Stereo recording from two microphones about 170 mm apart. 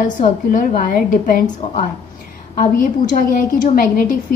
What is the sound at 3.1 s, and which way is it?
Speech, 55° left (ahead or behind).